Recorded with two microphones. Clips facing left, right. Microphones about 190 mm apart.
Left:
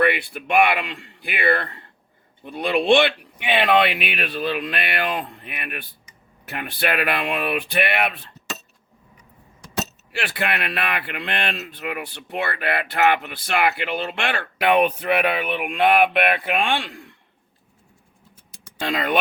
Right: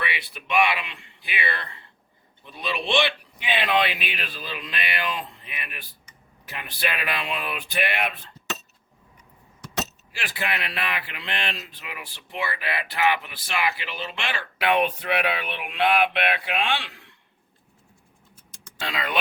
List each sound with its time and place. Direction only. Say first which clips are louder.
0.0 s speech: left 12 dB; 50° left (ahead or behind)
10.1 s speech: left 5 dB; 65° left (ahead or behind); by 17.1 s 45° left (ahead or behind)
18.8 s speech: left 6 dB; 50° left (ahead or behind)